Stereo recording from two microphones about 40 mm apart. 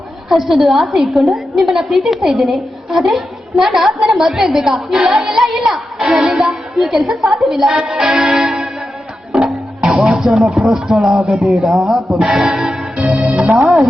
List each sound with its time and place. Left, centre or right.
0.3 s a woman's voice: centre
6.8 s speech: centre
9.3 s music: centre
9.8 s music: right
10.1 s a woman's voice: centre
12.3 s speech: centre
13.0 s music: right